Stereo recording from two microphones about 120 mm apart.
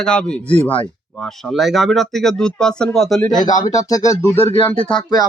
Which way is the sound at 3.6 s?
30° left (ahead or behind).